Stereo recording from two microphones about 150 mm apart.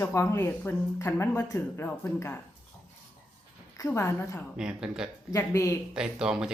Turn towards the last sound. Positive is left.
turn(degrees=-5)  # may be behind; listen again after turning